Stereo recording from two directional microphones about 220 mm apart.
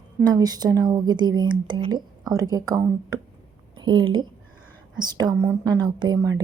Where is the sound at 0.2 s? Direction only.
15° right (ahead or behind).